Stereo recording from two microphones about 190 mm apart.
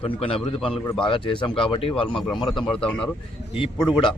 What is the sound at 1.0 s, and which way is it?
Speech, 25° left (ahead or behind).